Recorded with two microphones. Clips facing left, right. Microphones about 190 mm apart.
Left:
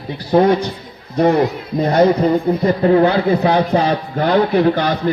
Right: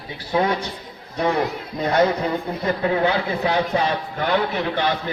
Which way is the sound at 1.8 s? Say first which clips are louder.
Left 6 dB; 40° left (ahead or behind).